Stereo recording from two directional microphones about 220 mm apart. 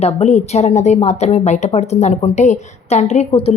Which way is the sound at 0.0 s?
30° left (ahead or behind).